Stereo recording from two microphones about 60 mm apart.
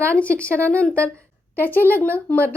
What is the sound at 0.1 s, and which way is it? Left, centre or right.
Speech, left.